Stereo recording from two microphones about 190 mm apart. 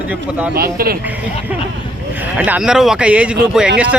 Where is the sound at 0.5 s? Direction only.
50° right (ahead or behind).